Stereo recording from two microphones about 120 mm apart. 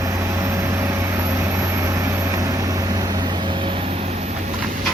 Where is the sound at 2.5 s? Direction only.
30° right (ahead or behind).